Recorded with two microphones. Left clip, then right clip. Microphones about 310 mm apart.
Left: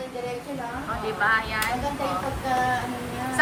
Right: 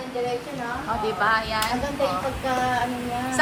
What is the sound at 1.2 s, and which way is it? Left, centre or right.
A woman's voice, centre.